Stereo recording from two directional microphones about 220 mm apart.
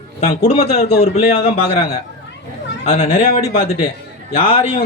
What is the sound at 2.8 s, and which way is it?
A man's voice, 25° left (ahead or behind).